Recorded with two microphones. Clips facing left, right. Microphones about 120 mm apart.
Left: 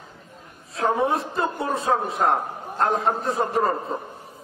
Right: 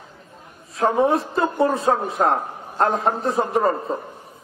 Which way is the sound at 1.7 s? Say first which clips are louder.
Right 2 dB; centre (ahead or behind).